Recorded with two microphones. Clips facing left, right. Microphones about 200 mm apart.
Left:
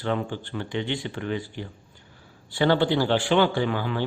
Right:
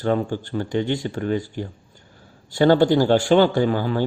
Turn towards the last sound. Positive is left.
turn(degrees=-40)  # may be behind; listen again after turning